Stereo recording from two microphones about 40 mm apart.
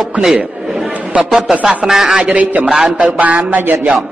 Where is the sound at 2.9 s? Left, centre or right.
Right.